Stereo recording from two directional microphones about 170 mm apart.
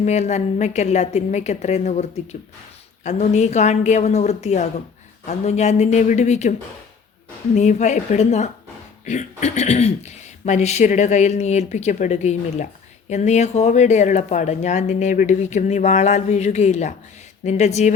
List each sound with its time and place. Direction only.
0.0 s a woman's voice: 40° left (ahead or behind)
7.5 s speech: 45° left (ahead or behind)